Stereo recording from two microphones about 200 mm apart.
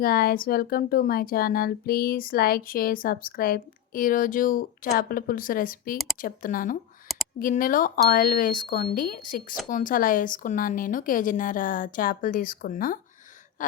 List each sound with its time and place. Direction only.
0.0 s speech: 45° left (ahead or behind)
13.6 s gasp: 40° left (ahead or behind)